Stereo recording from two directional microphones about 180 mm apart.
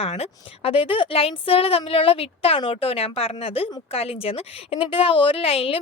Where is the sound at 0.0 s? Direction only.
35° left (ahead or behind).